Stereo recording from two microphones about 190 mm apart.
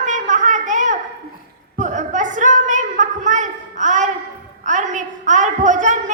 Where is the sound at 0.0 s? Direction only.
40° right (ahead or behind).